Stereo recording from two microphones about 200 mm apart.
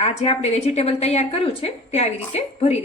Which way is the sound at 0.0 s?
30° left (ahead or behind).